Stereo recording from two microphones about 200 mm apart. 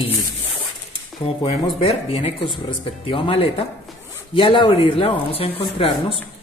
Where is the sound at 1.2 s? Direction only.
30° left (ahead or behind).